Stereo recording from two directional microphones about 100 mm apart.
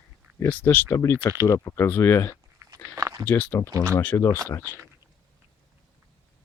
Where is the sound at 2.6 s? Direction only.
30° right (ahead or behind).